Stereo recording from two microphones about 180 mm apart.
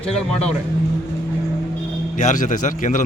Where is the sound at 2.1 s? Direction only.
45° left (ahead or behind).